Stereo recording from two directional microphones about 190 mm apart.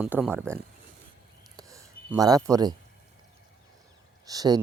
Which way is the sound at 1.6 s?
15° right (ahead or behind).